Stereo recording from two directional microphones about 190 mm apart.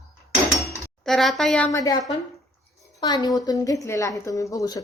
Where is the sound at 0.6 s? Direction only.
Centre (ahead or behind).